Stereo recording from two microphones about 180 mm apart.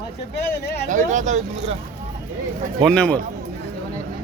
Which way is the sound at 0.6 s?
70° left (ahead or behind).